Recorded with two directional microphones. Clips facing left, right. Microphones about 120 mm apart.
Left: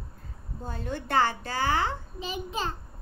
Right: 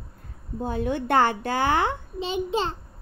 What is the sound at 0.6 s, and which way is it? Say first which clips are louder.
A woman's voice: right 9 dB; 60° right (ahead or behind).